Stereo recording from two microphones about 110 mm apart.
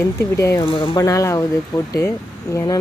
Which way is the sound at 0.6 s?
50° left (ahead or behind).